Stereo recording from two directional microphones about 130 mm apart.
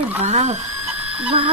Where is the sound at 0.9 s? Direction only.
10° right (ahead or behind).